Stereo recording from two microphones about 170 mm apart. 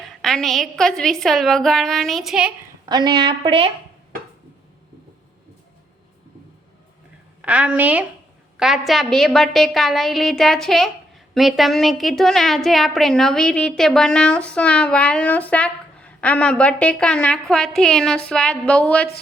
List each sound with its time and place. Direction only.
0.0 s a woman's voice: 5° left (ahead or behind)
2.9 s a woman's voice: 25° right (ahead or behind)
7.4 s a woman's voice: 5° right (ahead or behind)